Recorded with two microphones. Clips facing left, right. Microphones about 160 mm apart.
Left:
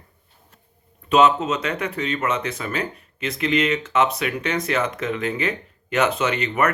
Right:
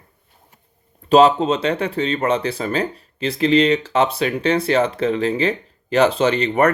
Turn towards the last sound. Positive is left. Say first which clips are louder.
# right 5 dB
turn(degrees=-35)  # may be behind; listen again after turning